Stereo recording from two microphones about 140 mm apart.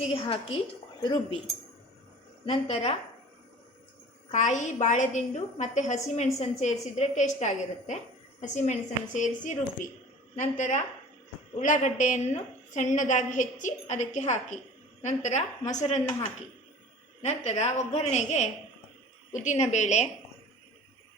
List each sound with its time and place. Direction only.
0.0 s a woman's voice: 45° left (ahead or behind)
2.5 s a woman's voice: 50° left (ahead or behind)
4.3 s a woman's voice: 60° left (ahead or behind)
17.2 s a woman's voice: 50° left (ahead or behind)